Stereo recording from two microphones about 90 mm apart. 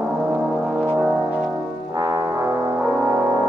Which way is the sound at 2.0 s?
45° right (ahead or behind).